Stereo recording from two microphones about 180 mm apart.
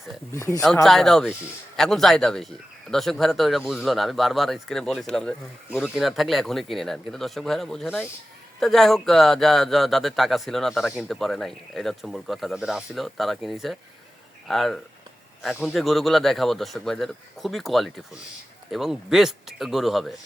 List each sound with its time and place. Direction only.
0.3 s speech: 15° left (ahead or behind)
0.9 s speech: centre (ahead or behind)